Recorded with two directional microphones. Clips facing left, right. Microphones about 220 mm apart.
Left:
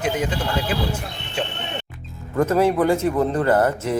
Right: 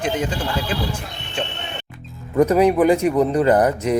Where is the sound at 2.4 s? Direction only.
15° right (ahead or behind).